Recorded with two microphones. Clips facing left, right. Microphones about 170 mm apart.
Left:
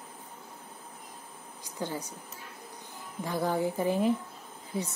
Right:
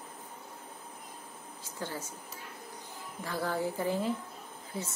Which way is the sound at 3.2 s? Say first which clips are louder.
Left 4 dB; 15° left (ahead or behind).